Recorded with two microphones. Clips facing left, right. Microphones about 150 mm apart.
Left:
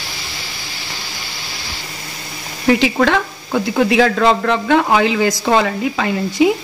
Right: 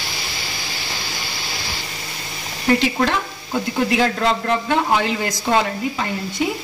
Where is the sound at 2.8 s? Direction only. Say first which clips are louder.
Left 5 dB; 90° left.